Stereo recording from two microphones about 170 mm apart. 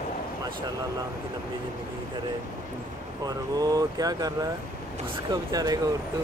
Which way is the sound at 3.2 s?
20° right (ahead or behind).